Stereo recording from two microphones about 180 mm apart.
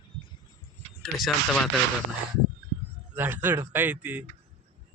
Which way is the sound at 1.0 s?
Centre (ahead or behind).